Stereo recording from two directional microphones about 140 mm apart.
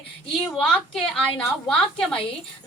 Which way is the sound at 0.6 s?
5° left (ahead or behind).